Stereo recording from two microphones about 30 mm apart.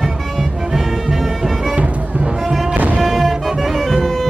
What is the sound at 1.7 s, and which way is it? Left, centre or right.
Music, right.